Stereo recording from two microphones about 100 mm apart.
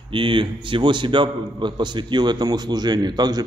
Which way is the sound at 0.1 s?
55° right (ahead or behind).